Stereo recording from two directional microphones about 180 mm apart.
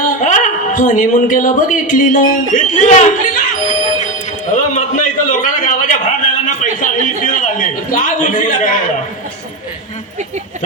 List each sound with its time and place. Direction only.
0.0 s speech: 45° left (ahead or behind)
4.0 s a sound: 45° left (ahead or behind)
6.7 s a man's voice: 45° left (ahead or behind)